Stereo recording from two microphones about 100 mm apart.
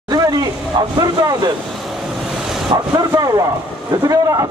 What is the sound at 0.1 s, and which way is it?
Vehicle, 40° right (ahead or behind).